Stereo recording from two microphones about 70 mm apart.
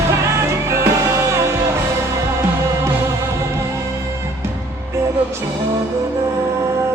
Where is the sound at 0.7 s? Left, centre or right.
Right.